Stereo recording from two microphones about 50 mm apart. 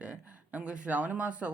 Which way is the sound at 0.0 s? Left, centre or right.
Right.